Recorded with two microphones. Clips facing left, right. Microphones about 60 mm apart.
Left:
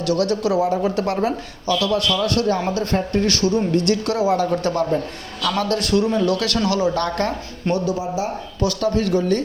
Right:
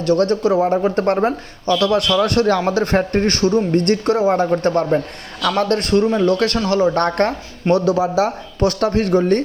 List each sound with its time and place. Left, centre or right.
0.0 s speech: right
1.8 s speech: right
7.7 s speech: right
8.5 s speech: right